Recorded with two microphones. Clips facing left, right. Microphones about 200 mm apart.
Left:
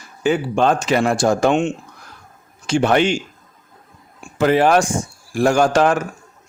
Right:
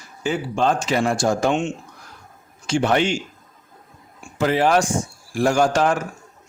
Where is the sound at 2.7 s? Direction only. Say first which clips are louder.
Left 3 dB; 65° left (ahead or behind).